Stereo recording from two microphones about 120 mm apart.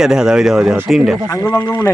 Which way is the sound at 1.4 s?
25° left (ahead or behind).